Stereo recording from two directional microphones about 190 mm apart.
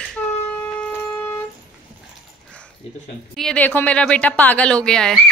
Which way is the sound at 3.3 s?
5° left (ahead or behind).